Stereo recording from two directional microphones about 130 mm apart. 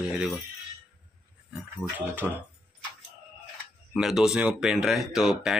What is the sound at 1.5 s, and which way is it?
Speech, 15° right (ahead or behind).